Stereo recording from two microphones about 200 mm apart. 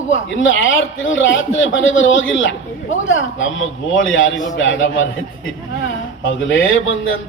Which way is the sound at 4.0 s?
75° left (ahead or behind).